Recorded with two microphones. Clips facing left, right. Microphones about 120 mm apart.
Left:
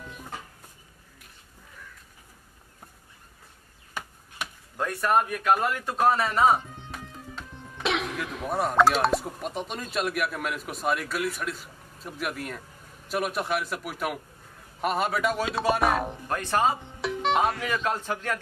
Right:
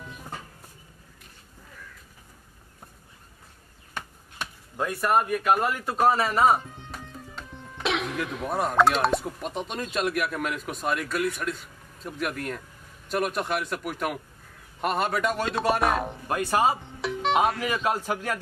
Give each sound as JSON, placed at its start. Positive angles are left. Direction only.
{"t": 4.7, "sound": "a man's voice", "side_deg": -5}